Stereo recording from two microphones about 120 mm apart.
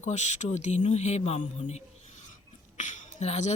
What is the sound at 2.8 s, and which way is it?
Speech, 90° left.